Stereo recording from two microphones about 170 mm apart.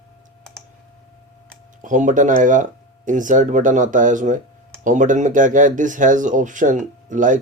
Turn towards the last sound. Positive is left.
turn(degrees=-50)  # may be behind; listen again after turning